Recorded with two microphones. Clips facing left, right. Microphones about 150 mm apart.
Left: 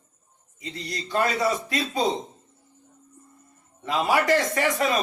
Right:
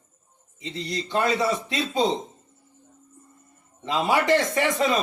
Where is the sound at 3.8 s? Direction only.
20° right (ahead or behind).